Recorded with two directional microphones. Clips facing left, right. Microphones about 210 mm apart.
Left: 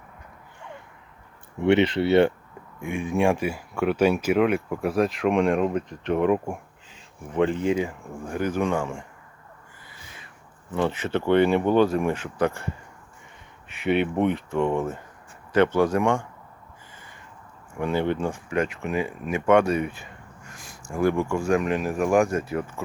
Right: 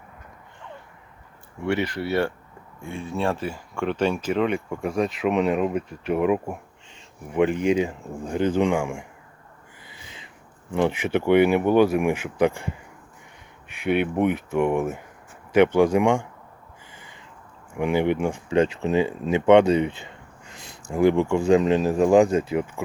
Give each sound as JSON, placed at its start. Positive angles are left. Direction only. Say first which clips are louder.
{"t": 1.6, "sound": "speech", "louder": "left 6 dB", "side_deg": 25}
{"t": 8.7, "sound": "speech", "louder": "right 2 dB", "side_deg": -10}
{"t": 9.8, "sound": "owl", "louder": "right 3 dB", "side_deg": -20}
{"t": 10.7, "sound": "speech", "louder": "right 3 dB", "side_deg": -15}
{"t": 13.8, "sound": "speech", "louder": "right 1 dB", "side_deg": -5}
{"t": 17.7, "sound": "speech", "louder": "right 3 dB", "side_deg": -15}
{"t": 18.4, "sound": "speech", "louder": "right 8 dB", "side_deg": -25}